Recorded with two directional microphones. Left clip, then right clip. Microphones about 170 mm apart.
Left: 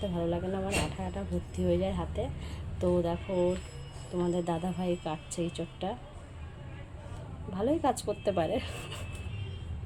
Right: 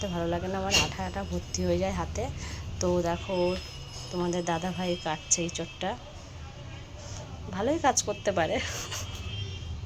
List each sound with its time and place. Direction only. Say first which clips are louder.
0.0 s speech: right 2 dB; centre (ahead or behind); by 6.0 s 15° left (ahead or behind)
7.5 s speech: right 3 dB; 15° left (ahead or behind)